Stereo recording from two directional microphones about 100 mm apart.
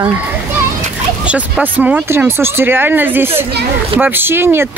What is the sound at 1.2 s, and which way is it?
Speech, 15° right (ahead or behind).